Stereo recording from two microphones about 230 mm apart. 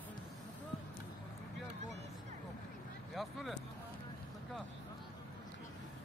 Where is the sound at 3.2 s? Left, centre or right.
Centre.